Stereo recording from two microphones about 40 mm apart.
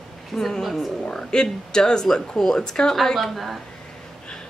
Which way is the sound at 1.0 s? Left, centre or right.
Centre.